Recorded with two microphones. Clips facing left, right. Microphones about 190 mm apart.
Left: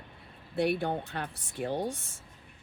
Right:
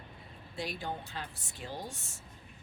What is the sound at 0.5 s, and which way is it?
Speech, 60° left (ahead or behind).